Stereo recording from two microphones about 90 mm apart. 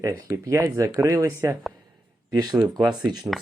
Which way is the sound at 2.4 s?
45° right (ahead or behind).